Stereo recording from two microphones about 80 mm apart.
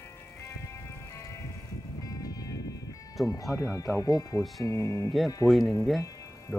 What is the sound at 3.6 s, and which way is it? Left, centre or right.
Speech, left.